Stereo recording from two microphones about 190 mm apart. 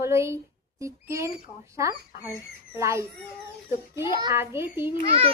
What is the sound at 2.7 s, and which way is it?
A child's voice, 15° right (ahead or behind).